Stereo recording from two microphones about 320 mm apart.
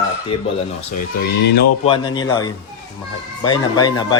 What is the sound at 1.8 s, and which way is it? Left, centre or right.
Speech, centre.